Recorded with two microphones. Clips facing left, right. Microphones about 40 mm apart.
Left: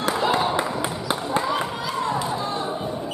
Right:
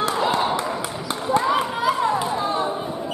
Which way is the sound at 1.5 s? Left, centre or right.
Centre.